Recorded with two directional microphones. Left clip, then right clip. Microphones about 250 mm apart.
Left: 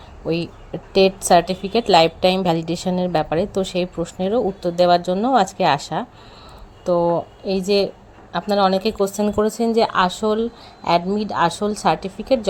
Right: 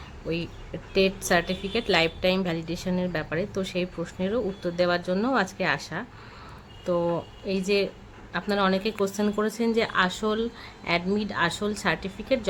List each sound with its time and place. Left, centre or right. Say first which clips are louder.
0.3 s a woman's voice: left 8 dB; centre
7.1 s a woman's voice: left 8 dB; centre